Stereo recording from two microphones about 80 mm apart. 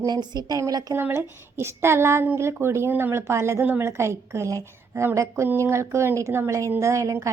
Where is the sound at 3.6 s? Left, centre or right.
Right.